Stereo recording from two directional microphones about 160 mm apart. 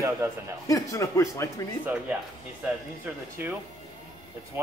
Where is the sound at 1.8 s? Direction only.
10° right (ahead or behind).